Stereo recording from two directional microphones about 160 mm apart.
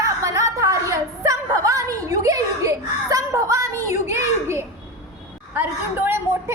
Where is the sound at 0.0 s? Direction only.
20° right (ahead or behind).